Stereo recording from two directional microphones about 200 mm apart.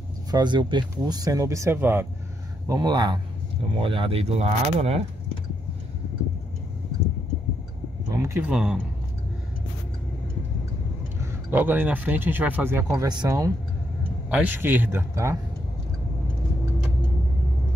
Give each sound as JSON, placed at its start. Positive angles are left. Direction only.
{"t": 0.3, "sound": "speech", "side_deg": -20}
{"t": 8.1, "sound": "speech", "side_deg": -15}
{"t": 11.1, "sound": "speech", "side_deg": -10}